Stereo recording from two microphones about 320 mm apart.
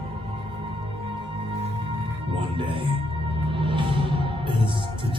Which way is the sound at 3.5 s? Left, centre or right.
Centre.